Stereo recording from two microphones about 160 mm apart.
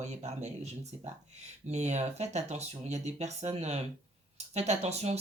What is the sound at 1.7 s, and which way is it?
Speech, 45° right (ahead or behind).